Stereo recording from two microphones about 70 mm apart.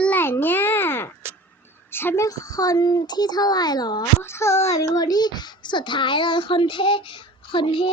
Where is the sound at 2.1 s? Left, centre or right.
Left.